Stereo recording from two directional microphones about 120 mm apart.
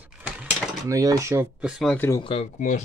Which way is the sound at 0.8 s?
30° right (ahead or behind).